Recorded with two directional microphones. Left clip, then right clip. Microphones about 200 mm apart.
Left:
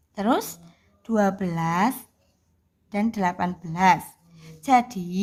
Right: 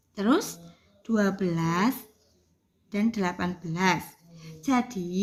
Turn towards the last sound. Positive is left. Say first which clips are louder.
# left 8 dB
turn(degrees=50)  # may be behind; listen again after turning